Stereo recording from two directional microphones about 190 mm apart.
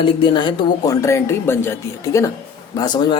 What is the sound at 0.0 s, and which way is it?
Speech, 25° left (ahead or behind).